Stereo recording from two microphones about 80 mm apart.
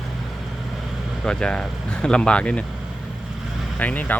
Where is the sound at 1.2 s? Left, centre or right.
Centre.